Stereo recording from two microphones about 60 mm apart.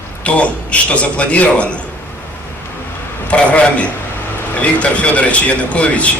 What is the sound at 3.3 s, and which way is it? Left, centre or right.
A man's voice, left.